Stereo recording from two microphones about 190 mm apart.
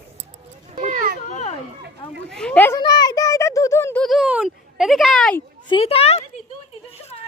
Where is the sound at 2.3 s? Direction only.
5° left (ahead or behind).